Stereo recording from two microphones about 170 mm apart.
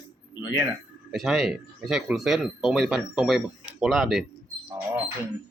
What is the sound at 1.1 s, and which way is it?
Speech, centre (ahead or behind).